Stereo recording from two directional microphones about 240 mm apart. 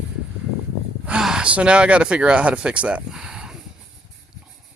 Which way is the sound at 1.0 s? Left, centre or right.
Centre.